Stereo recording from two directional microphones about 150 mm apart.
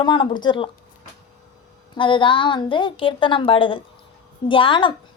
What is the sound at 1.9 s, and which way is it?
A woman's voice, 35° left (ahead or behind).